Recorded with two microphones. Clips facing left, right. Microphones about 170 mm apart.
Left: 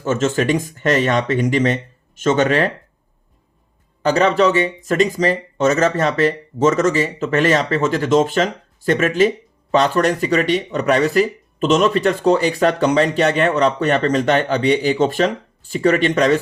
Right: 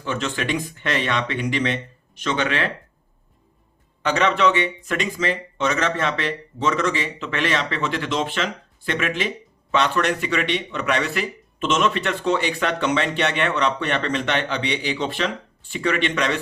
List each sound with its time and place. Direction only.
0.0 s speech: 45° left (ahead or behind)
4.0 s speech: 40° left (ahead or behind)